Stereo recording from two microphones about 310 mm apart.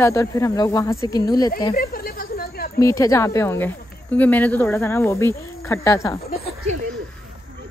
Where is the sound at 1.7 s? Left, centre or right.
Left.